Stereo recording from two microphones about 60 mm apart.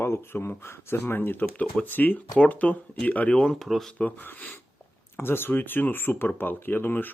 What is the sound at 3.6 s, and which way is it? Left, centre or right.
Speech, centre.